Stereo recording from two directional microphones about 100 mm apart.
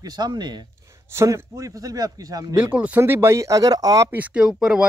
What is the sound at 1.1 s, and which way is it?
Speech, 30° right (ahead or behind).